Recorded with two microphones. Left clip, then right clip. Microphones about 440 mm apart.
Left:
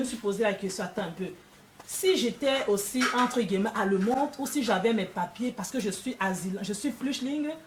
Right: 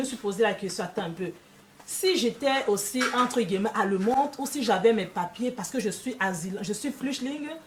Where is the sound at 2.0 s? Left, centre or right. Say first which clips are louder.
Right 1 dB; right.